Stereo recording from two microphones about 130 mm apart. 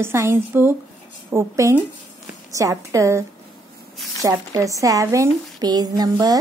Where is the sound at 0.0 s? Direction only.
20° right (ahead or behind).